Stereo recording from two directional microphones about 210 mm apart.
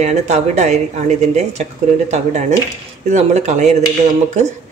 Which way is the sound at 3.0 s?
35° right (ahead or behind).